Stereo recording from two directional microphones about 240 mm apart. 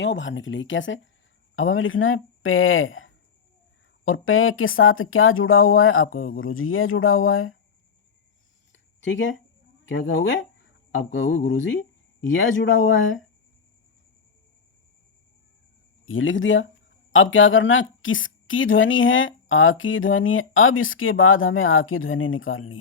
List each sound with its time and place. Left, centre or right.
0.0 s a woman's voice: left
8.7 s a sound: left
9.9 s speech: left
16.0 s a woman's voice: left